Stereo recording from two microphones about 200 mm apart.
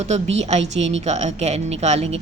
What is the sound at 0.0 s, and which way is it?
Speech, 35° right (ahead or behind).